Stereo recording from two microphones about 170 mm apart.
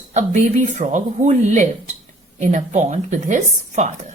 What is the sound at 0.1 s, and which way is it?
A woman's voice, 40° right (ahead or behind).